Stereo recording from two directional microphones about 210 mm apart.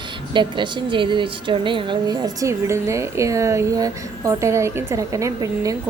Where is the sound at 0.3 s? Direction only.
20° right (ahead or behind).